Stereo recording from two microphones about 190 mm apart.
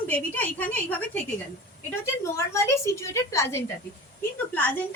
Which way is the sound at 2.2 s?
15° left (ahead or behind).